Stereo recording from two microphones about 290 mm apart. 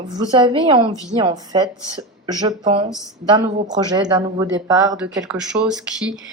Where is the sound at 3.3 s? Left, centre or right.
Centre.